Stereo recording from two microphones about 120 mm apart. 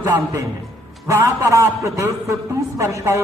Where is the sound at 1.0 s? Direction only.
25° right (ahead or behind).